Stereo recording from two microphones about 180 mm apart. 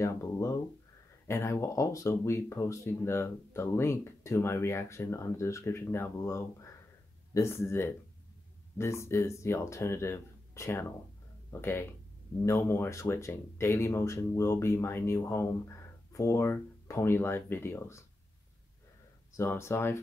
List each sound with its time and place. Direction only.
0.0 s speech: 15° left (ahead or behind)
19.3 s speech: 15° left (ahead or behind)